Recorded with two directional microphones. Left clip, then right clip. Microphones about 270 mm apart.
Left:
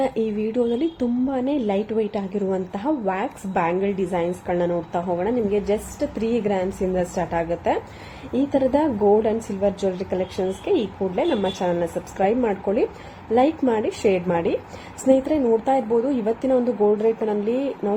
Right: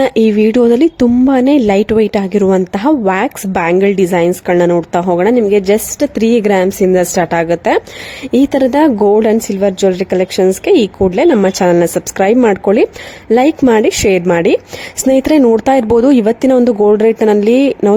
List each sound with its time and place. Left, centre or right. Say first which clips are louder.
0.0 s speech: right 13 dB; right